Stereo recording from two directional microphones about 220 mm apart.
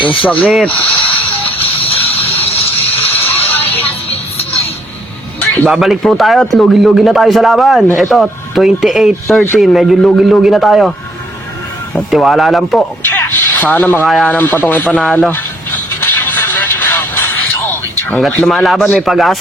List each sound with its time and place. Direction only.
0.0 s speech: 20° left (ahead or behind)
0.4 s a man's voice: centre (ahead or behind)
2.1 s vehicle: 25° left (ahead or behind)
3.2 s music: 10° left (ahead or behind)
4.1 s music: 25° left (ahead or behind)
5.4 s a man's voice: centre (ahead or behind)
11.9 s a sound: centre (ahead or behind)
17.7 s speech: 5° left (ahead or behind)